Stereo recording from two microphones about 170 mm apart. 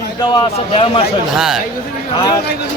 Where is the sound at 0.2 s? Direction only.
30° left (ahead or behind).